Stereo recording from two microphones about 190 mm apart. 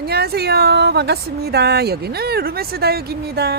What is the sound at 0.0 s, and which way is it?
Speech, 55° right (ahead or behind).